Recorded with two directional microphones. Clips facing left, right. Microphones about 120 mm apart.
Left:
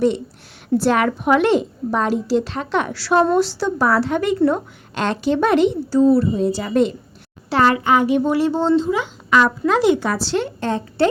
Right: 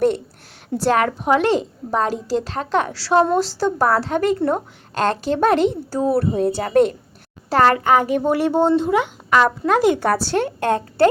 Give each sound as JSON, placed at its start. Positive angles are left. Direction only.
{"t": 0.8, "sound": "a woman's voice", "side_deg": -35}
{"t": 3.3, "sound": "a woman's voice", "side_deg": -40}
{"t": 9.4, "sound": "a woman's voice", "side_deg": -45}